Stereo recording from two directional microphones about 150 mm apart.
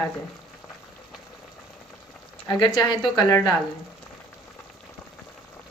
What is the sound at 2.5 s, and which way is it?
Speech, 30° left (ahead or behind).